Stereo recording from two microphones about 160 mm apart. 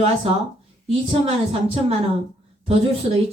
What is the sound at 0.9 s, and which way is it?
Speech, 40° right (ahead or behind).